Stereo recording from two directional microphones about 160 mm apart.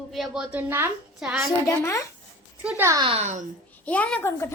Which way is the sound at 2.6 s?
15° right (ahead or behind).